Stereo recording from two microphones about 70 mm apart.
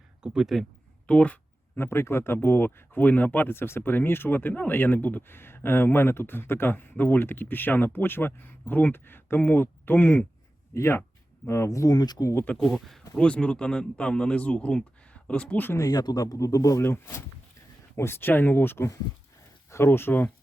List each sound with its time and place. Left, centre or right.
0.2 s speech: centre
1.0 s speech: centre
1.7 s speech: left
10.8 s speech: left
12.5 s speech: centre
15.8 s speech: left
17.9 s speech: left